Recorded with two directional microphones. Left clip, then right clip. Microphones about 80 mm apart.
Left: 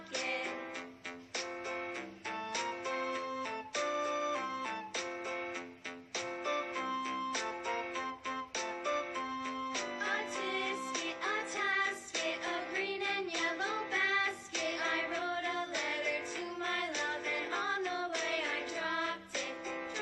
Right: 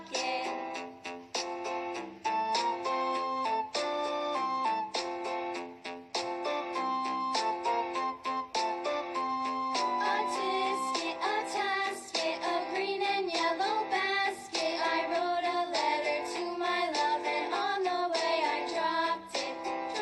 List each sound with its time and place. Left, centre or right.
0.2 s music: right
2.2 s music: right
6.1 s music: right